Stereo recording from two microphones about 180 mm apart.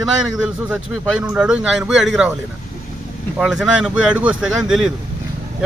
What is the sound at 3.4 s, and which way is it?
A man's voice, 5° right (ahead or behind).